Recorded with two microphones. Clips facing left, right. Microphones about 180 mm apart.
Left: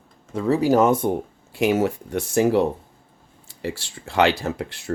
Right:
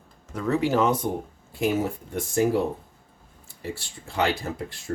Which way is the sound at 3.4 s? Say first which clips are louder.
Left 5 dB; 90° left.